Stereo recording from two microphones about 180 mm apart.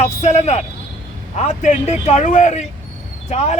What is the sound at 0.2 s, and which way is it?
Speech, 40° left (ahead or behind).